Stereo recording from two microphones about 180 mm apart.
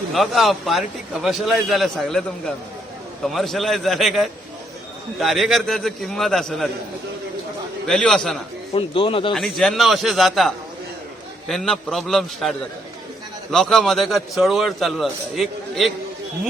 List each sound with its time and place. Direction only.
0.1 s a man's voice: centre (ahead or behind)
3.2 s a man's voice: centre (ahead or behind)
7.9 s a man's voice: 5° left (ahead or behind)
8.7 s speech: 30° left (ahead or behind)
9.3 s a man's voice: centre (ahead or behind)